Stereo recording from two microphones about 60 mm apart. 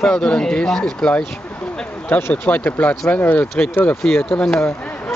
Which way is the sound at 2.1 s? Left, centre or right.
Left.